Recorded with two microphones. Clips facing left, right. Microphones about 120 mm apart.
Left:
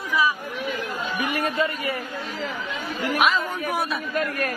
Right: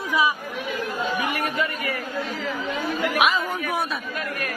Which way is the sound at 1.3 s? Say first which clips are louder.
Left 2 dB; 25° left (ahead or behind).